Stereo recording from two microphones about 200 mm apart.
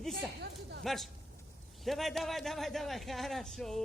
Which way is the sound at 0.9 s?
Centre (ahead or behind).